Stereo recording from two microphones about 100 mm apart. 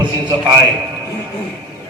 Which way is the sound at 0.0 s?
50° right (ahead or behind).